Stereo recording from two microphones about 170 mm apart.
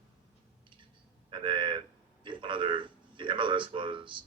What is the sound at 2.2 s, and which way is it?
A man's voice, 30° right (ahead or behind).